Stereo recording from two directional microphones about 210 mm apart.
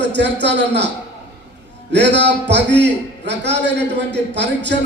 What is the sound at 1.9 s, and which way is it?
A man's voice, 55° right (ahead or behind).